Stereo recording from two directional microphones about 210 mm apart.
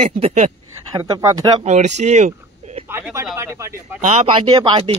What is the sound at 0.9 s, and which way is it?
Speech, 20° right (ahead or behind).